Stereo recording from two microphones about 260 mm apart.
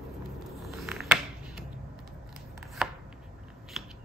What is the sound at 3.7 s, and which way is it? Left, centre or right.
Scissors, centre.